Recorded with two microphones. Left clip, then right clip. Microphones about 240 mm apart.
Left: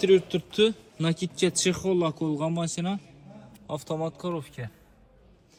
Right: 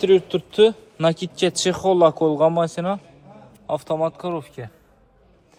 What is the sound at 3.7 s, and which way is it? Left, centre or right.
Speech, right.